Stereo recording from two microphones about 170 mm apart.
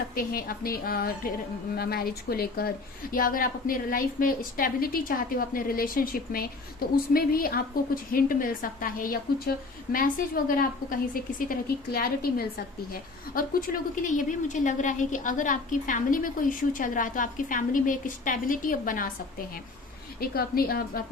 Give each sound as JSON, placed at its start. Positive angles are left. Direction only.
{"t": 0.1, "sound": "a woman's voice", "side_deg": 55}